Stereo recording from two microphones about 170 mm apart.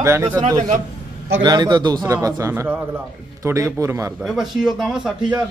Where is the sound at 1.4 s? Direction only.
25° right (ahead or behind).